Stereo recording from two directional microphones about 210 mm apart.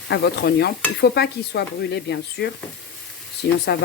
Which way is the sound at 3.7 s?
50° left (ahead or behind).